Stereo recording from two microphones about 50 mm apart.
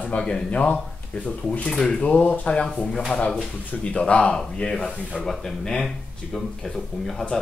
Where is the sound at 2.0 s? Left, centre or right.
Left.